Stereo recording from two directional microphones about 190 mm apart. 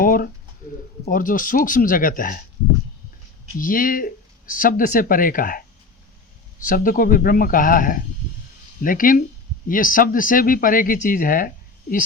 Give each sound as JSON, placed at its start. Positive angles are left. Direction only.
{"t": 0.0, "sound": "a sound", "side_deg": 45}
{"t": 1.0, "sound": "speech", "side_deg": 45}
{"t": 3.6, "sound": "speech", "side_deg": 45}
{"t": 6.7, "sound": "speech", "side_deg": 45}